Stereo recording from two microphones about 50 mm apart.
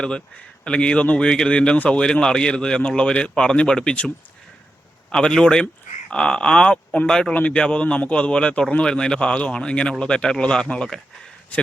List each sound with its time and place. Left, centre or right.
0.6 s speech: left
5.1 s speech: centre